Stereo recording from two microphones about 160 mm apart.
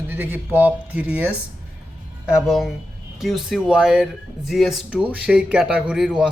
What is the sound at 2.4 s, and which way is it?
Speech, centre (ahead or behind).